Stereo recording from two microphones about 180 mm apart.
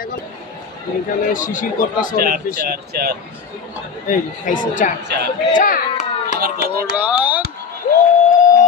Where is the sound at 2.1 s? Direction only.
55° right (ahead or behind).